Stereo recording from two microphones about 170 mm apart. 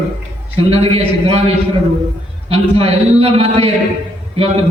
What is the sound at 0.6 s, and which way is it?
Speech, 35° right (ahead or behind).